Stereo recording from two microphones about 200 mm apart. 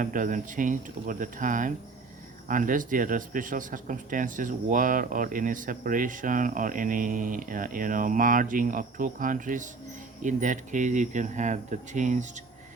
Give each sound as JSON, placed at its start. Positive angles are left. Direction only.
{"t": 0.0, "sound": "speech", "side_deg": -40}